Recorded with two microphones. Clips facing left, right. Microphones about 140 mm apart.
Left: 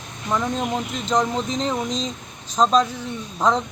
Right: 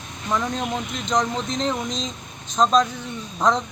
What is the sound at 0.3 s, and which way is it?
Speech, 10° left (ahead or behind).